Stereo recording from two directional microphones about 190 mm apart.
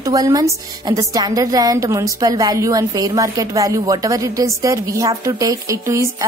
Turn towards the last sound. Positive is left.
turn(degrees=-15)  # may be behind; listen again after turning